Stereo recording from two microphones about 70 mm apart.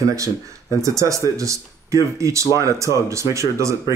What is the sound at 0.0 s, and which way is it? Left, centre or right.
Speech, right.